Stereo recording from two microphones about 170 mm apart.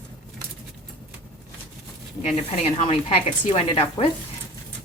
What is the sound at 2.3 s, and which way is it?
Speech, 35° left (ahead or behind).